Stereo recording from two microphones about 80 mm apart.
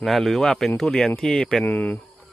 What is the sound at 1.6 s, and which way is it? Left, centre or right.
Speech, centre.